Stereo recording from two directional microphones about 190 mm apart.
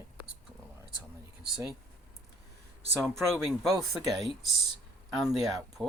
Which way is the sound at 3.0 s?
Centre (ahead or behind).